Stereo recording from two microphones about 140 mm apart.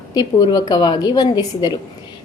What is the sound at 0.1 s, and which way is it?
A woman's voice, 30° left (ahead or behind).